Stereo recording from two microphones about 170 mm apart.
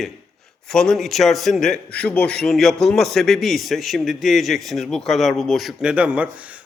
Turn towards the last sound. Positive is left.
turn(degrees=-10)  # may be behind; listen again after turning